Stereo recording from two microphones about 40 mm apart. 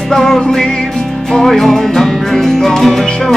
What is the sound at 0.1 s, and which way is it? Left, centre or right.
Music, centre.